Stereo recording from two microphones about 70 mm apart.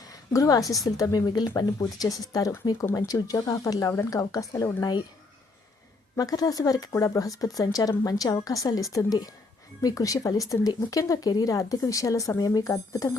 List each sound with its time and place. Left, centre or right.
0.1 s a woman's voice: left
4.8 s speech: left
6.1 s speech: left